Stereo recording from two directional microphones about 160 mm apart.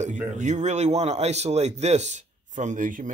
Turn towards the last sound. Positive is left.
turn(degrees=-55)  # may be behind; listen again after turning